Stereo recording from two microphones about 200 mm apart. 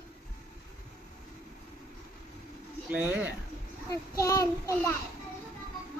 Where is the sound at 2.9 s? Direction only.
10° right (ahead or behind).